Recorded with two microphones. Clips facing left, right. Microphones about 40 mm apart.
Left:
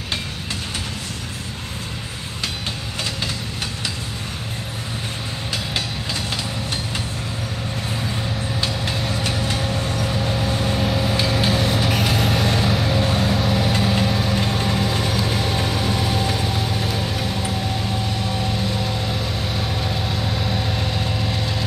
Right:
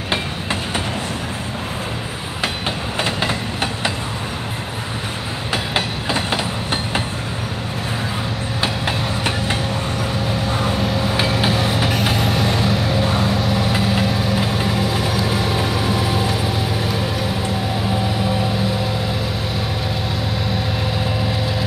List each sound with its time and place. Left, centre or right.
3.0 s train: right
5.8 s train: right
8.5 s vehicle: right
9.6 s vehicle: centre